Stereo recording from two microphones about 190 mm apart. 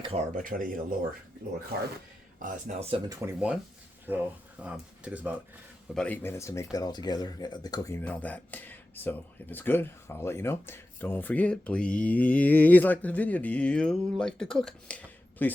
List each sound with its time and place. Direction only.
0.3 s speech: 45° right (ahead or behind)
2.4 s speech: 40° right (ahead or behind)
3.1 s speech: 15° right (ahead or behind)
5.9 s speech: 5° left (ahead or behind)